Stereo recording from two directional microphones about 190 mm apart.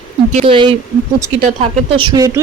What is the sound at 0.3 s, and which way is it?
Speech, 25° right (ahead or behind).